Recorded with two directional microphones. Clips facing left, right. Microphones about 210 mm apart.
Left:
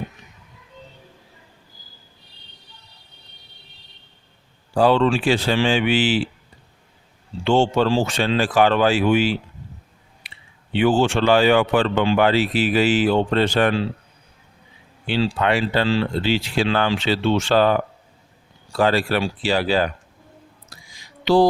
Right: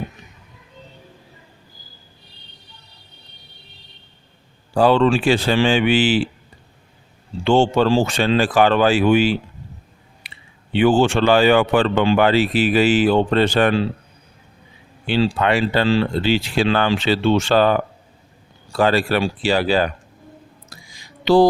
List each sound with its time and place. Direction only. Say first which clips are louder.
4.8 s speech: right 2 dB; 55° right (ahead or behind)
7.4 s speech: right 2 dB; 55° right (ahead or behind)
10.8 s speech: right 2 dB; 50° right (ahead or behind)
15.1 s speech: right 2 dB; 55° right (ahead or behind)
18.8 s speech: right 2 dB; 55° right (ahead or behind)